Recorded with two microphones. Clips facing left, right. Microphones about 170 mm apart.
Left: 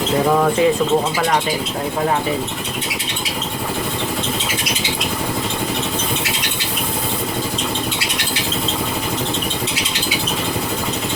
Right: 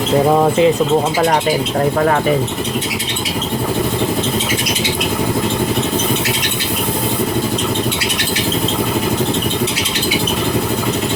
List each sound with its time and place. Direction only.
0.3 s speech: 25° right (ahead or behind)